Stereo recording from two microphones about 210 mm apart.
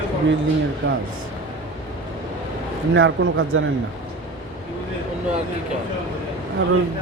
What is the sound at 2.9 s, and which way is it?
Speech, 65° right (ahead or behind).